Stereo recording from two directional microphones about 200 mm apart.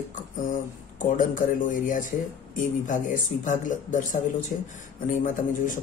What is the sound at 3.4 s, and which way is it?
Speech, 40° left (ahead or behind).